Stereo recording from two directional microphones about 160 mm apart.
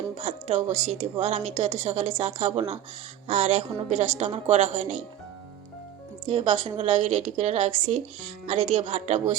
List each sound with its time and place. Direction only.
0.2 s a woman's voice: 45° right (ahead or behind)
6.2 s a woman's voice: 35° right (ahead or behind)